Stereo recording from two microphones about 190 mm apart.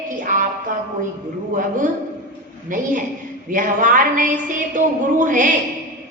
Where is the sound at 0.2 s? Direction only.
45° right (ahead or behind).